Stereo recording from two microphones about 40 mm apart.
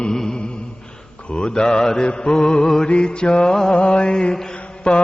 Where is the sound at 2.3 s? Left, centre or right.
Centre.